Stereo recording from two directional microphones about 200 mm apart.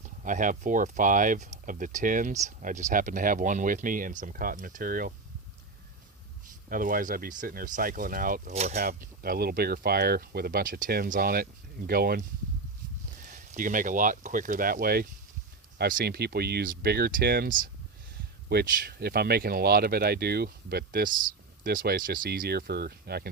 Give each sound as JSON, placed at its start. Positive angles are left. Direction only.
{"t": 0.0, "sound": "speech", "side_deg": -40}
{"t": 6.7, "sound": "speech", "side_deg": -45}
{"t": 8.9, "sound": "speech", "side_deg": -45}
{"t": 13.2, "sound": "speech", "side_deg": -40}